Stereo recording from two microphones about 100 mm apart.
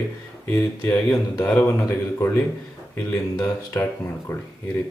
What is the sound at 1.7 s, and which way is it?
A man's voice, 30° left (ahead or behind).